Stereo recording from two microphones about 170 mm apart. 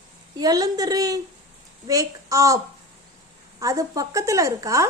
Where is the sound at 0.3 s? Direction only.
20° right (ahead or behind).